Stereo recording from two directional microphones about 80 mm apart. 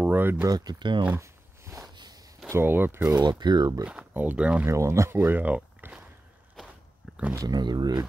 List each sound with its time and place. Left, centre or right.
0.0 s speech: right
0.5 s speech: right
1.2 s a sound: right
2.5 s speech: right
3.2 s speech: right
4.1 s speech: right
4.6 s speech: right; by 6.0 s centre
7.4 s speech: right